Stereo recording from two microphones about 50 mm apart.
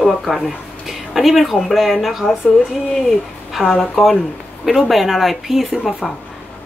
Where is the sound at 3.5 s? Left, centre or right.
Centre.